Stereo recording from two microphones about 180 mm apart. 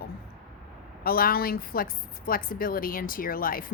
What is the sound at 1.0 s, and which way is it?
A woman's voice, 55° left (ahead or behind).